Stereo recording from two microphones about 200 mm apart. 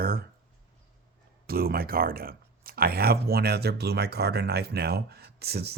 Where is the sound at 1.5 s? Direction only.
50° right (ahead or behind).